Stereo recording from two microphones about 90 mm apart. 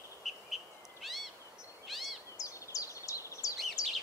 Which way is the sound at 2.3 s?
40° left (ahead or behind).